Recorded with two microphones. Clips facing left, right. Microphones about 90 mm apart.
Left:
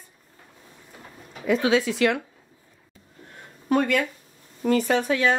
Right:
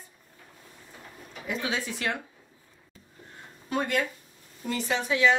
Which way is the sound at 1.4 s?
90° left.